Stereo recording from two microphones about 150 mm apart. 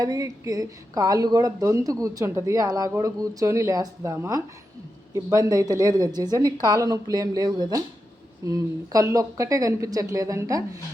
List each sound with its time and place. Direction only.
0.0 s speech: 25° right (ahead or behind)